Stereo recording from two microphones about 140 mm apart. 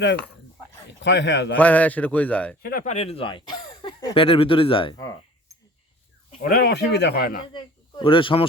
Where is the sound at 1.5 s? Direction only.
10° left (ahead or behind).